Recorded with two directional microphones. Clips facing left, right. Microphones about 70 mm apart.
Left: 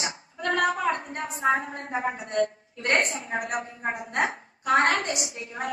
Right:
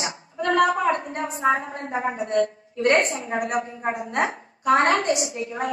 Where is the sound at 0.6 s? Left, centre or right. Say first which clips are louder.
Right 5 dB; right.